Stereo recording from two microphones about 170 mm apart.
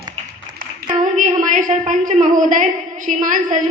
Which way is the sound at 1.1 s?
50° right (ahead or behind).